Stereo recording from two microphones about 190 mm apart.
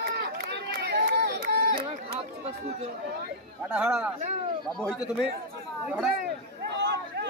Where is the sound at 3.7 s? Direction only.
5° right (ahead or behind).